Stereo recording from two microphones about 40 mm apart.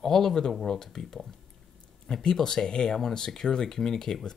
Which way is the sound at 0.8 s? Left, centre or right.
Centre.